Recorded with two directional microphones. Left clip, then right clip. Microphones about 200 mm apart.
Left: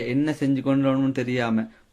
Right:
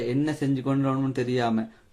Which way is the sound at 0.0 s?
35° left (ahead or behind).